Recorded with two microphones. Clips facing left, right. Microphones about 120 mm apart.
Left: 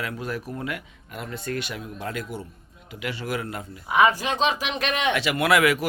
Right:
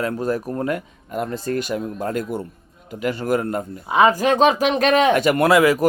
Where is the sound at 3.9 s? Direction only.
30° right (ahead or behind).